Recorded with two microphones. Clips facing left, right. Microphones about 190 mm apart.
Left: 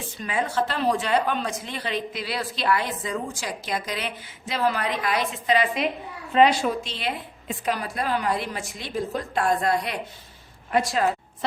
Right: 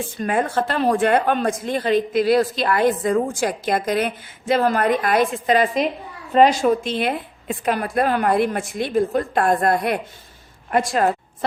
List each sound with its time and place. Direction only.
0.2 s a woman's voice: 50° right (ahead or behind)